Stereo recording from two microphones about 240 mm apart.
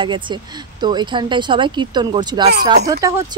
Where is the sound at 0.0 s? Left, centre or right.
Centre.